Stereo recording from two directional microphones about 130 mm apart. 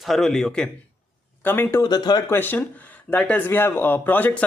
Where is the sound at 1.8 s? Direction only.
30° left (ahead or behind).